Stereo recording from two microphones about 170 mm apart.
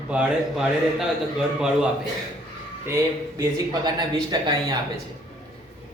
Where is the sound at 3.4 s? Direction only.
25° right (ahead or behind).